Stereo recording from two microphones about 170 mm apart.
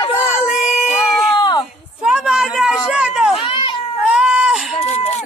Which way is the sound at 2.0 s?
5° right (ahead or behind).